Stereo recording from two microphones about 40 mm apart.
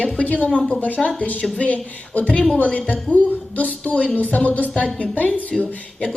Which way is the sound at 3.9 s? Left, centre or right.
Left.